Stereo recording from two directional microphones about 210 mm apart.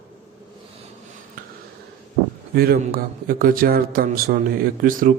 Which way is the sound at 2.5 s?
45° right (ahead or behind).